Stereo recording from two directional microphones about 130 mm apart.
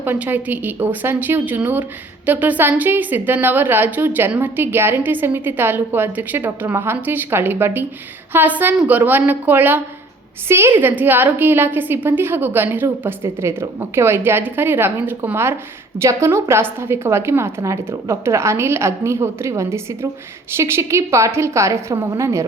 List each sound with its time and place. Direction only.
0.0 s a woman's voice: 15° right (ahead or behind)